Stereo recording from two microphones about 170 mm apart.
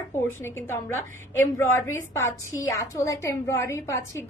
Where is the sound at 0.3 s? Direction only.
15° left (ahead or behind).